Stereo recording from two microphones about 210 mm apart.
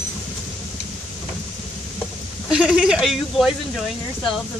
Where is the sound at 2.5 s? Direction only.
5° right (ahead or behind).